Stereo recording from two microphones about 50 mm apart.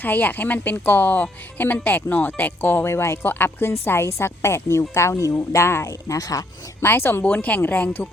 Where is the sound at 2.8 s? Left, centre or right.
Left.